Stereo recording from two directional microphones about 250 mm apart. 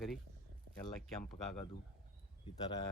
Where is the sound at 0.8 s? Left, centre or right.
Centre.